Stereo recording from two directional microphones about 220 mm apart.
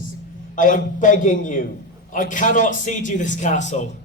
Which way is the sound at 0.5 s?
35° left (ahead or behind).